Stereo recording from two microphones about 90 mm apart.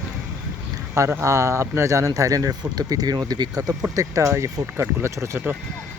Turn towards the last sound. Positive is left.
turn(degrees=-30)  # may be behind; listen again after turning